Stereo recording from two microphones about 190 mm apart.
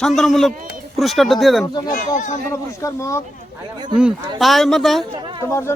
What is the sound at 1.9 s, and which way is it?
Speech, 40° left (ahead or behind).